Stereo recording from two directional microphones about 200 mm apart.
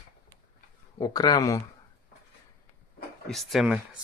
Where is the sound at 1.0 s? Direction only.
20° left (ahead or behind).